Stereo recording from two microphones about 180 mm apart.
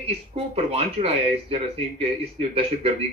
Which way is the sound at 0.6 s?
35° right (ahead or behind).